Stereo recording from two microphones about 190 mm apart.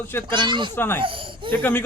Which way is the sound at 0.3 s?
25° right (ahead or behind).